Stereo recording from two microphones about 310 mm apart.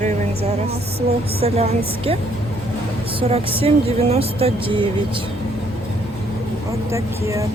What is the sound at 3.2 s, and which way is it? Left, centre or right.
Speech, centre.